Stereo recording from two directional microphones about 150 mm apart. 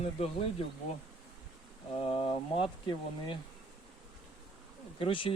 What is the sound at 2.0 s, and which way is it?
Speech, 40° left (ahead or behind).